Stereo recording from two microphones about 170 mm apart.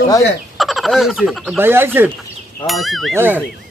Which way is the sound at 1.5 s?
15° right (ahead or behind).